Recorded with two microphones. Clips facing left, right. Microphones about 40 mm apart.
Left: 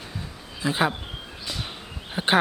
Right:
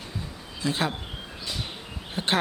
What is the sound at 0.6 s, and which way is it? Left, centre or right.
Speech, centre.